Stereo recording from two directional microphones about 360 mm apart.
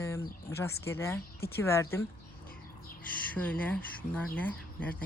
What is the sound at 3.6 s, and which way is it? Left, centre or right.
Speech, centre.